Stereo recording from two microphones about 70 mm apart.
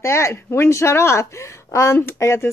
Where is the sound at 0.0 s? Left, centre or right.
Left.